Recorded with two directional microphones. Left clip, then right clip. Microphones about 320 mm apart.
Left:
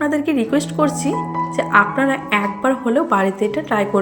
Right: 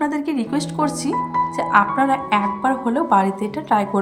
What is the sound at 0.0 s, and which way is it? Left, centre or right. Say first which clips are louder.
A woman's voice: left 4 dB; centre.